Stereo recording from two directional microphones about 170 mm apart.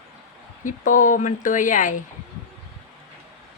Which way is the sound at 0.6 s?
50° left (ahead or behind).